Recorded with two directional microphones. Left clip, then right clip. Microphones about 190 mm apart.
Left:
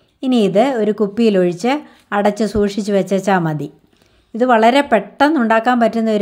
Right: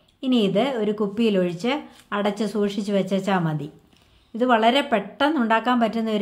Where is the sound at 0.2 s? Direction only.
40° left (ahead or behind).